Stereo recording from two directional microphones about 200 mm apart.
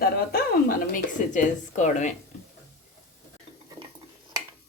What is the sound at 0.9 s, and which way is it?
A woman's voice, 40° left (ahead or behind).